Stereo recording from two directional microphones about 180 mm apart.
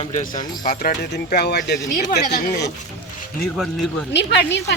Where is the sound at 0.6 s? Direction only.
50° left (ahead or behind); by 2.7 s 65° left (ahead or behind).